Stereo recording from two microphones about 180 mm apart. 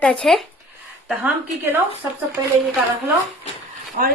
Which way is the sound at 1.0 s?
10° right (ahead or behind).